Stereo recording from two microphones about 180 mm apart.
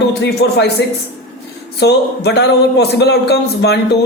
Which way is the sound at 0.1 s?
65° left (ahead or behind).